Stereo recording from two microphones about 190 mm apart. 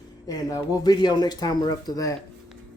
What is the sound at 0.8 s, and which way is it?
Speech, 20° left (ahead or behind).